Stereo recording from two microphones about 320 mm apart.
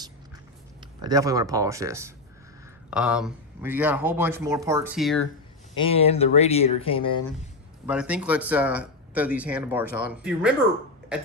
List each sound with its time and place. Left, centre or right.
0.8 s speech: centre
5.8 s speech: centre
7.9 s speech: centre